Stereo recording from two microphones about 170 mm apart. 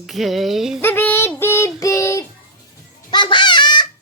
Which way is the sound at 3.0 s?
25° left (ahead or behind).